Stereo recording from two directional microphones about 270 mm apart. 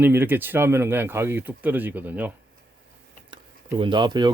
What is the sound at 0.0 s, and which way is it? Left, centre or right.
Speech, centre.